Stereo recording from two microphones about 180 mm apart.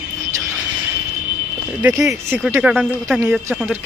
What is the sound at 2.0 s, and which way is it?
Speech, 5° right (ahead or behind).